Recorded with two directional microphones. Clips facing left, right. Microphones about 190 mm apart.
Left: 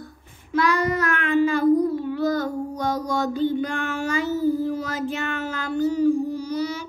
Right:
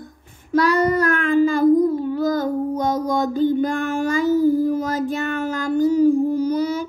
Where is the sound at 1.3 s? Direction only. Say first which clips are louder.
Right 3 dB; 45° right (ahead or behind).